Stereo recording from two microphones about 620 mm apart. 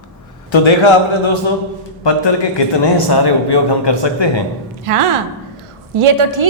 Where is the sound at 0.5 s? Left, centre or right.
Left.